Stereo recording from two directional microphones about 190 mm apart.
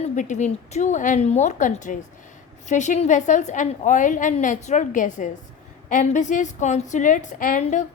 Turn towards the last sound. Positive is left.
turn(degrees=40)  # may be behind; listen again after turning